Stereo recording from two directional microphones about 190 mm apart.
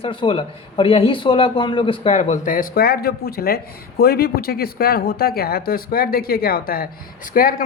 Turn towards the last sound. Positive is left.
turn(degrees=50)  # may be behind; listen again after turning